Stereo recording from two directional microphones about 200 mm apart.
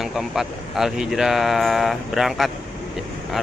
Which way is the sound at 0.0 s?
Centre (ahead or behind).